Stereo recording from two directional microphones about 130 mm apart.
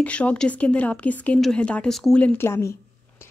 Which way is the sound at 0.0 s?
10° left (ahead or behind).